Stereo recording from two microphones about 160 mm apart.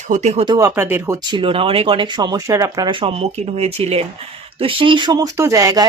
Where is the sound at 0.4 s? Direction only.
25° right (ahead or behind).